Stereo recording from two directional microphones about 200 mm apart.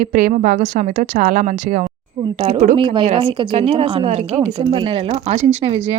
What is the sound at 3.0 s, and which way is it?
A woman's voice, 30° right (ahead or behind).